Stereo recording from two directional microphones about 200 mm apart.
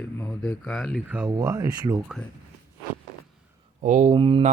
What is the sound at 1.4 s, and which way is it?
Speech, 20° right (ahead or behind).